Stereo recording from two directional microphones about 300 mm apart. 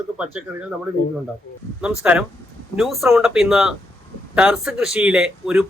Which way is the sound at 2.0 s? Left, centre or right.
Centre.